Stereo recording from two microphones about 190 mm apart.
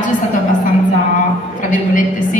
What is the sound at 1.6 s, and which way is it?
Speech, 45° left (ahead or behind).